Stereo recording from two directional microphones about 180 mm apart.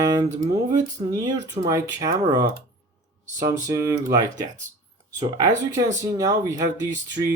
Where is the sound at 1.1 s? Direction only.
20° right (ahead or behind).